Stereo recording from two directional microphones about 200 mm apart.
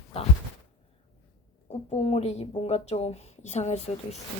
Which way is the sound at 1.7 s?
30° left (ahead or behind).